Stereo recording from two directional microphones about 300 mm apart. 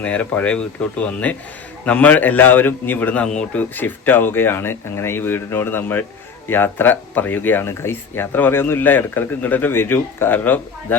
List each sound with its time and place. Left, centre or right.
0.0 s a man's voice: centre